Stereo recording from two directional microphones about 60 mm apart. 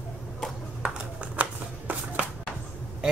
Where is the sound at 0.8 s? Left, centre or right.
Right.